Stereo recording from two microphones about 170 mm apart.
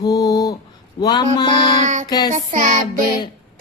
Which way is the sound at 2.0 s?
25° left (ahead or behind).